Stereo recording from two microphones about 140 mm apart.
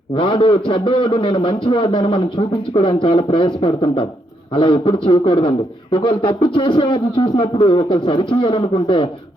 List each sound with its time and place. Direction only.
0.1 s a man's voice: 35° left (ahead or behind)